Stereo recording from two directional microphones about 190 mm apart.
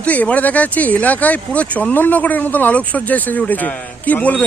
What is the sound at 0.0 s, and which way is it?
Speech, 5° left (ahead or behind).